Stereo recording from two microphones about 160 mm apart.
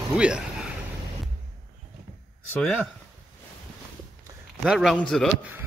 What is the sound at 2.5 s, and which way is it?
Speech, 10° left (ahead or behind).